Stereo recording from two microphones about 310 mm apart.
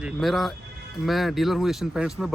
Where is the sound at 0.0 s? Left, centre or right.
Centre.